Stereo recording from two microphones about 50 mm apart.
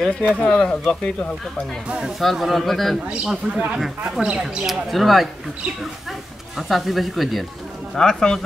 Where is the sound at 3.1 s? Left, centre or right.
Centre.